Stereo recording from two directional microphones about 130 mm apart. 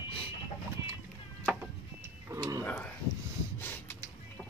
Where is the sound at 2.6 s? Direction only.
10° left (ahead or behind).